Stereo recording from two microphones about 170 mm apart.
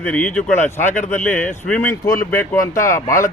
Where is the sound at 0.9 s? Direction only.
45° left (ahead or behind).